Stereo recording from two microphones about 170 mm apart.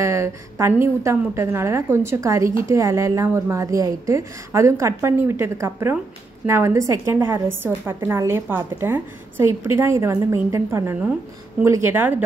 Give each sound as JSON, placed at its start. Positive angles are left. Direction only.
{"t": 0.0, "sound": "a woman's voice", "side_deg": -15}